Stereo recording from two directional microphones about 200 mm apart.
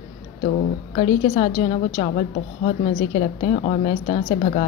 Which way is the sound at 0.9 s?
30° left (ahead or behind).